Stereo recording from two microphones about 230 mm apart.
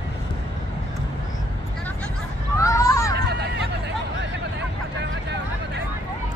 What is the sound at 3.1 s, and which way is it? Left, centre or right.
Hubbub, right.